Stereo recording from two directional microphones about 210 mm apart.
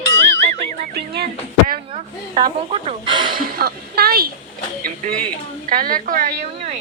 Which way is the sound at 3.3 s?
45° right (ahead or behind).